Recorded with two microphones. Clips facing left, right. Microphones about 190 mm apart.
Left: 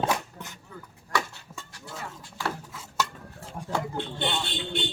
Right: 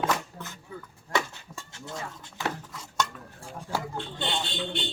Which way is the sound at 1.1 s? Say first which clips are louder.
Right 1 dB; 20° right (ahead or behind).